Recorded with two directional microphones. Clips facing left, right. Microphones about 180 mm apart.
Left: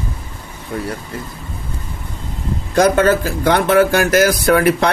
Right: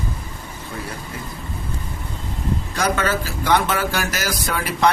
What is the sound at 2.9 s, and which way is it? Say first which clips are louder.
Speech: left 8 dB; 50° left (ahead or behind).